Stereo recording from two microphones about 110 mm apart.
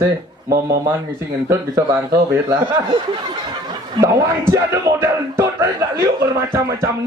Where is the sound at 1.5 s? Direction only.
30° right (ahead or behind).